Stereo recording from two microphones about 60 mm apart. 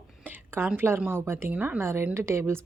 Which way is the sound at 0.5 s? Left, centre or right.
Right.